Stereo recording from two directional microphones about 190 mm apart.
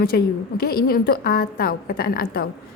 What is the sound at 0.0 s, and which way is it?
A woman's voice, 55° left (ahead or behind).